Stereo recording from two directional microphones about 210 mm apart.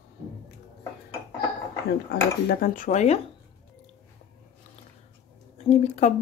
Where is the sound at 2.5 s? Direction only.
40° left (ahead or behind).